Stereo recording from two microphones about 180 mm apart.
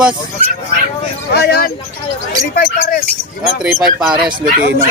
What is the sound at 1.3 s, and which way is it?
Speech, 65° left (ahead or behind).